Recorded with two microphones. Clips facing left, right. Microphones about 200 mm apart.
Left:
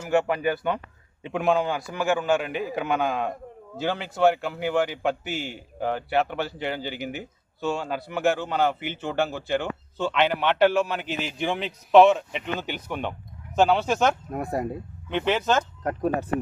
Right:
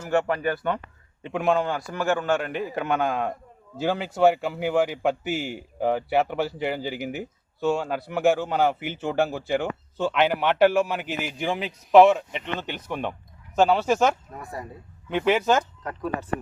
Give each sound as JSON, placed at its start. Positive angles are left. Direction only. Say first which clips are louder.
{"t": 0.0, "sound": "a man's voice", "louder": "left 1 dB", "side_deg": 10}
{"t": 14.3, "sound": "speech", "louder": "left 9 dB", "side_deg": 55}
{"t": 15.1, "sound": "a man's voice", "louder": "right 2 dB", "side_deg": -10}
{"t": 15.8, "sound": "speech", "louder": "left 6 dB", "side_deg": 50}